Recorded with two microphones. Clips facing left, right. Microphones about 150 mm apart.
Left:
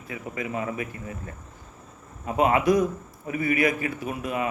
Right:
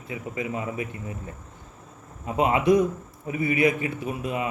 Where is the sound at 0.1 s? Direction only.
20° right (ahead or behind).